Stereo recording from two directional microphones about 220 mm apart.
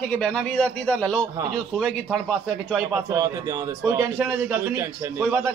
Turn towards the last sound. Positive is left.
turn(degrees=-10)  # may be behind; listen again after turning